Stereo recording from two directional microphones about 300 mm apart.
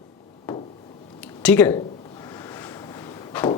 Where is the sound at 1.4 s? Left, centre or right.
Centre.